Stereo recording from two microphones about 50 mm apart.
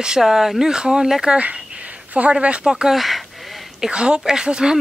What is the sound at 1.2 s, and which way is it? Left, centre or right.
Speech, right.